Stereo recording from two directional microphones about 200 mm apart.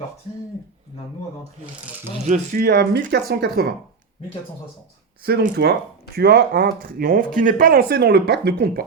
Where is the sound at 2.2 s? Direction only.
40° right (ahead or behind).